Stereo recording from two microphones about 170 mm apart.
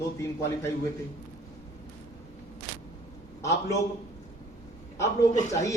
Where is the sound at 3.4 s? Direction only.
15° left (ahead or behind).